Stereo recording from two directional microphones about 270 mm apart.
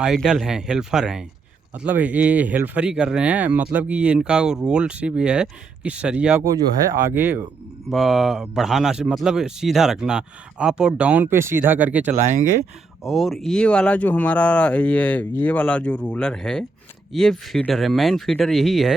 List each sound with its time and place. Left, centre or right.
0.0 s speech: centre
12.1 s speech: right
13.1 s speech: centre